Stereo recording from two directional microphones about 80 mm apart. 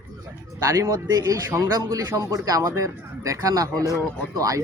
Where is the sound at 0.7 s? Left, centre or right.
Right.